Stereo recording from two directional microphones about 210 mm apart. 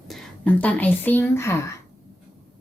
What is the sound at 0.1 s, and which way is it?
A woman's voice, 5° left (ahead or behind).